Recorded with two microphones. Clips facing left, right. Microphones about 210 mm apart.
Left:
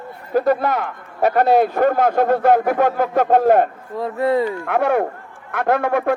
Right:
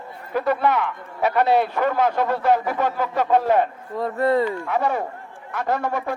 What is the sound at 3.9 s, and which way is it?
Speech, 5° left (ahead or behind).